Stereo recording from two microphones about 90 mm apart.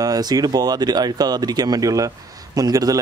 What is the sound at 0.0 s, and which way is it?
Speech, 45° right (ahead or behind).